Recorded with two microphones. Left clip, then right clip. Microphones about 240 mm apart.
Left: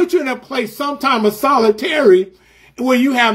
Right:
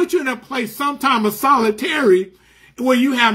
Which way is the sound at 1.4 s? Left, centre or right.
Right.